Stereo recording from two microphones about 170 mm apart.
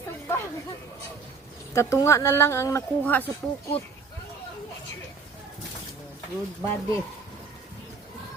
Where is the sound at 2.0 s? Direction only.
15° left (ahead or behind).